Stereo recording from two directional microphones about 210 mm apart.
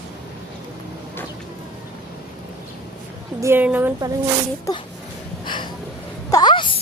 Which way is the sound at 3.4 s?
10° right (ahead or behind).